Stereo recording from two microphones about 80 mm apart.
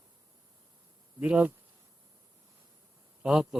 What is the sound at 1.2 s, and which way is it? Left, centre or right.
Speech, centre.